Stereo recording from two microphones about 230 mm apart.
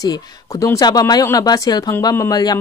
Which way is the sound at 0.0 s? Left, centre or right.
Centre.